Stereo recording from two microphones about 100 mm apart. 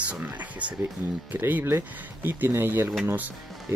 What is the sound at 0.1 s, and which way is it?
Speech, 15° right (ahead or behind).